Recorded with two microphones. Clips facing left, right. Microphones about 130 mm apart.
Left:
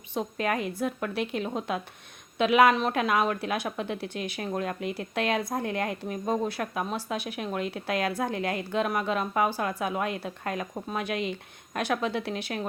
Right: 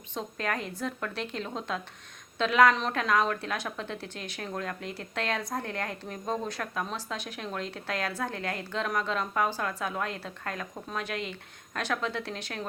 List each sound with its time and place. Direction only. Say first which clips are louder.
0.1 s speech: left 4 dB; 15° left (ahead or behind)